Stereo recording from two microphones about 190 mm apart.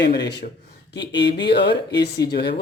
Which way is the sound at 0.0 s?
60° left (ahead or behind).